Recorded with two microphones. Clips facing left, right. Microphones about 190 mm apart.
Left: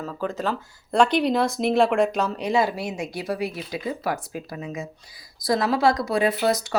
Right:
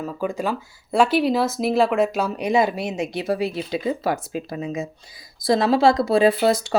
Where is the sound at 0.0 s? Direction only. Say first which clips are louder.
Right 2 dB; 10° right (ahead or behind).